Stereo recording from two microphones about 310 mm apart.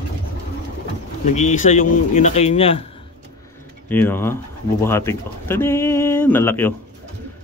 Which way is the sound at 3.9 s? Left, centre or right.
Centre.